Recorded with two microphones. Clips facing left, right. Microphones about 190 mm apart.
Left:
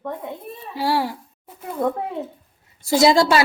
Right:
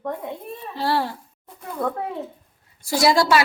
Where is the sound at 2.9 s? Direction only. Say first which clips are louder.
Left 3 dB; 20° left (ahead or behind).